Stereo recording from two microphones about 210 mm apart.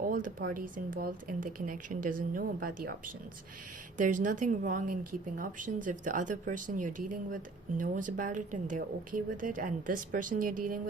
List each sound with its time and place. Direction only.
0.0 s speech: 40° right (ahead or behind)
3.9 s speech: 40° right (ahead or behind)